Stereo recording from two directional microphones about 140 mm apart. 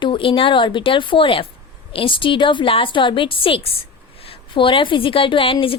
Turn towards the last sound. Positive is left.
turn(degrees=40)  # may be behind; listen again after turning